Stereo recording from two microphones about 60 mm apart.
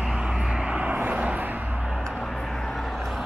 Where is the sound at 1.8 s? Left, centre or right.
Centre.